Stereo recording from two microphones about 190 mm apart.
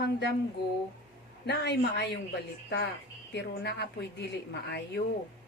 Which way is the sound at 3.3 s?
60° left (ahead or behind).